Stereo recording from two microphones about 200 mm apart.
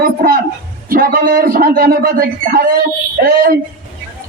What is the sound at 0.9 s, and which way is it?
A man's voice, 45° right (ahead or behind).